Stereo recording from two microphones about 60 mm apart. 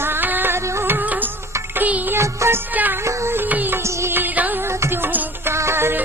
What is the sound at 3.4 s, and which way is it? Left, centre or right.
Music, right.